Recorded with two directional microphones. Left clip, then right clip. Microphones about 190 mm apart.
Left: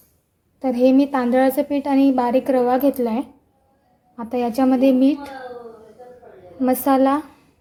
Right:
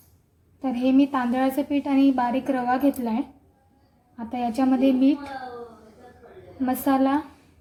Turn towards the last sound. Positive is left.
turn(degrees=30)  # may be behind; listen again after turning